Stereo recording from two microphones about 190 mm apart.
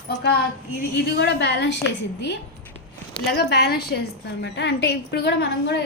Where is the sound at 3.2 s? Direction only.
55° left (ahead or behind).